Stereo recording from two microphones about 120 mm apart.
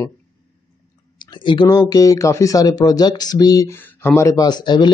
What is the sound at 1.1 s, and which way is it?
Speech, 40° left (ahead or behind).